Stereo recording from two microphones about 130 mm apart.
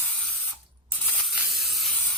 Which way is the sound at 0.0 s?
10° left (ahead or behind).